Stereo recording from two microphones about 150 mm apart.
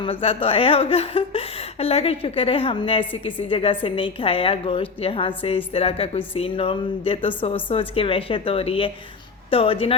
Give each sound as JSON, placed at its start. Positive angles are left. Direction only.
{"t": 0.0, "sound": "a woman's voice", "side_deg": 40}